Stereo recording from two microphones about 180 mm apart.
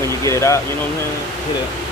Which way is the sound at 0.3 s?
15° left (ahead or behind).